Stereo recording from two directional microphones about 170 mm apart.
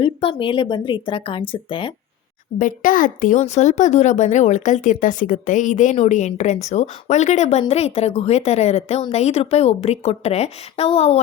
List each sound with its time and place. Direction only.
0.0 s a woman's voice: 30° left (ahead or behind)
2.6 s a woman's voice: 50° left (ahead or behind)